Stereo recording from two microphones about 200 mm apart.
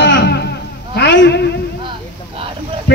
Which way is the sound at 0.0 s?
60° left (ahead or behind).